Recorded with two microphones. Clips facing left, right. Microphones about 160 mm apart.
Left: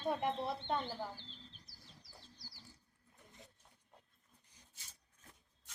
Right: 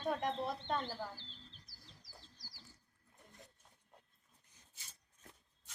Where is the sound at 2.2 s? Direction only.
90° right.